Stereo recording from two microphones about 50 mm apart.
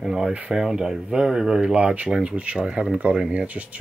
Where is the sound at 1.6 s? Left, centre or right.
Right.